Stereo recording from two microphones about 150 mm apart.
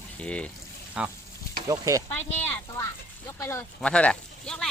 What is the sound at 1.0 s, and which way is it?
Speech, 5° right (ahead or behind).